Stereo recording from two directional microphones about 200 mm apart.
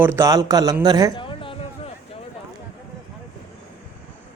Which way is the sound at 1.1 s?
25° left (ahead or behind).